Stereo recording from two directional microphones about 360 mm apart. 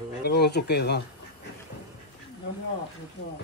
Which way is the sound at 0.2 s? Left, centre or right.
Left.